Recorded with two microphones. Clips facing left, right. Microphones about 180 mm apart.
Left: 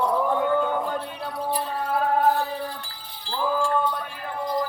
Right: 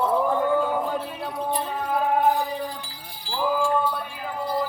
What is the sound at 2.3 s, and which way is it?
Sheep, 15° right (ahead or behind).